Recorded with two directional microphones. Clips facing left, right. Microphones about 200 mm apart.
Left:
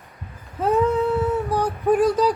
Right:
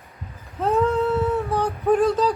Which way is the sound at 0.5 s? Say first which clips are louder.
Left 1 dB; 10° left (ahead or behind).